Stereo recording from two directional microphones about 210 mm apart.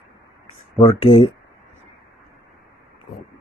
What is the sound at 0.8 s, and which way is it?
Speech, 25° left (ahead or behind).